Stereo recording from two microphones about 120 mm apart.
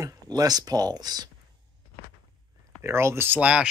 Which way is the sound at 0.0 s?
30° right (ahead or behind).